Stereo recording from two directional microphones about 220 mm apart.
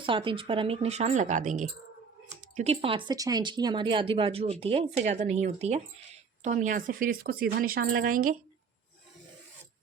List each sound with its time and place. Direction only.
0.0 s a woman's voice: 25° right (ahead or behind); by 8.4 s 40° right (ahead or behind)